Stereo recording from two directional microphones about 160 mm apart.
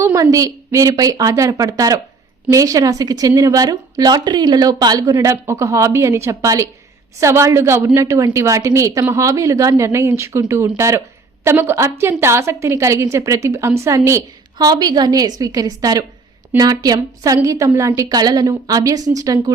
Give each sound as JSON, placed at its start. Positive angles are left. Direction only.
{"t": 0.0, "sound": "a woman's voice", "side_deg": -20}